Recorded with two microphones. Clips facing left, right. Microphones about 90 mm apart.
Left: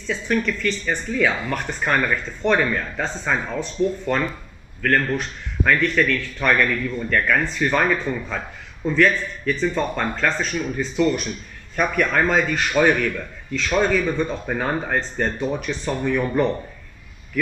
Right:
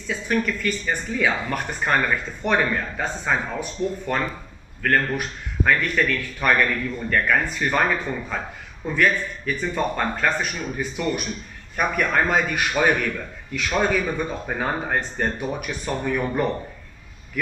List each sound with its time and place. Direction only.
0.1 s speech: 10° right (ahead or behind)